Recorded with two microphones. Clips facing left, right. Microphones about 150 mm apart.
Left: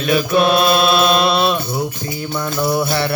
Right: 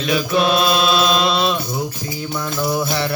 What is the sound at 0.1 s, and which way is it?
Mantra, 55° left (ahead or behind).